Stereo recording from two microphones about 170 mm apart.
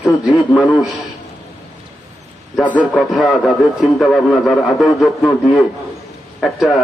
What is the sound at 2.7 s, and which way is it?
Speech, centre (ahead or behind).